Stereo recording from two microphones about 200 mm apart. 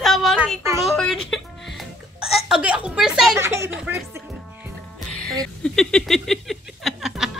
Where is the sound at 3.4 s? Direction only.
15° right (ahead or behind).